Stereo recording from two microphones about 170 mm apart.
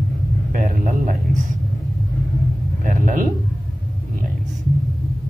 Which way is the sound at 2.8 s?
50° right (ahead or behind).